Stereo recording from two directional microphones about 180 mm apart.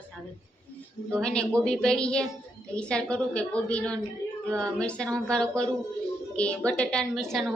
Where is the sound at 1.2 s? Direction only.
5° left (ahead or behind).